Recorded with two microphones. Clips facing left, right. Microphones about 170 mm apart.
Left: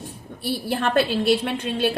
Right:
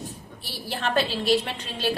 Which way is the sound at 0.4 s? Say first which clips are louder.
Left 6 dB; 50° left (ahead or behind).